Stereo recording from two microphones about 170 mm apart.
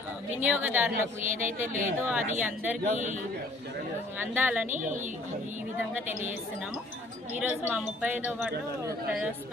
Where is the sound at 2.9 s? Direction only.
45° right (ahead or behind).